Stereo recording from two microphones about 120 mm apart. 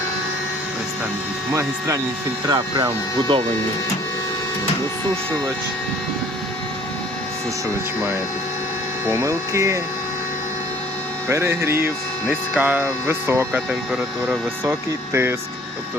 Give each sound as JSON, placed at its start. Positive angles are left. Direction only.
{"t": 2.5, "sound": "speech", "side_deg": -35}
{"t": 9.0, "sound": "speech", "side_deg": -25}
{"t": 11.3, "sound": "speech", "side_deg": -20}